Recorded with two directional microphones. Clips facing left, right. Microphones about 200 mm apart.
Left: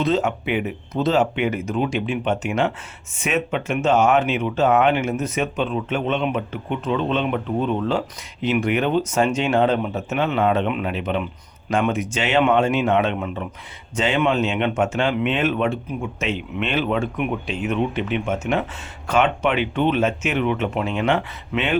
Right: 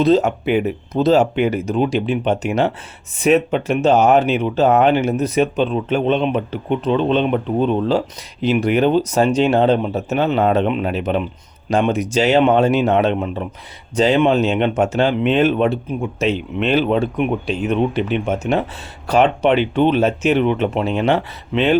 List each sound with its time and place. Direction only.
0.0 s speech: 40° right (ahead or behind)